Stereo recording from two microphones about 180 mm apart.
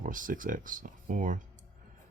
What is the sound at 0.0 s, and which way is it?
Speech, 45° right (ahead or behind).